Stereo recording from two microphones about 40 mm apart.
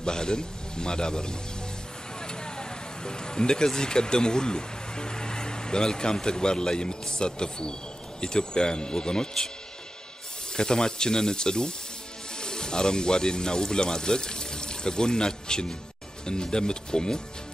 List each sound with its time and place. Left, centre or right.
0.0 s a man's voice: centre
10.5 s a man's voice: centre